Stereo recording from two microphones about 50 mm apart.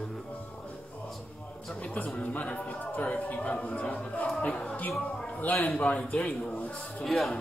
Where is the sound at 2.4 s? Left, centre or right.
Left.